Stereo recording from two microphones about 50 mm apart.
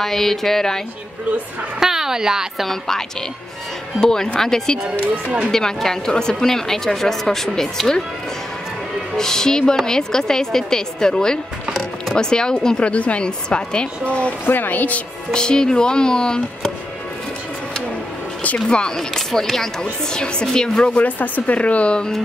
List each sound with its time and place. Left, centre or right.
0.0 s speech: centre
1.8 s speech: centre
2.6 s speech: centre
4.0 s speech: centre
5.0 s speech: right
5.5 s speech: centre
9.1 s speech: centre
14.4 s a woman's voice: left
15.3 s speech: centre
18.7 s speech: centre
20.9 s speech: left